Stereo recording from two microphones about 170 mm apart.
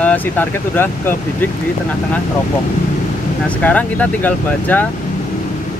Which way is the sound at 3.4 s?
10° left (ahead or behind).